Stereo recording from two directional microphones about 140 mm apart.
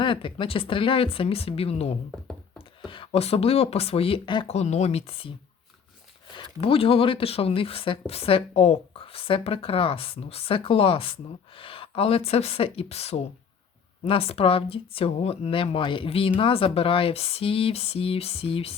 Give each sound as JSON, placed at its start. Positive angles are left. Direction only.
{"t": 0.0, "sound": "speech", "side_deg": 35}
{"t": 4.4, "sound": "speech", "side_deg": 55}
{"t": 6.3, "sound": "speech", "side_deg": 40}